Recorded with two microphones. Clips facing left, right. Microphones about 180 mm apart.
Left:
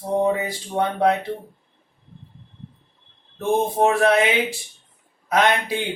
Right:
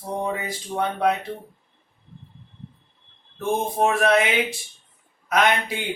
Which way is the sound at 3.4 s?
20° left (ahead or behind).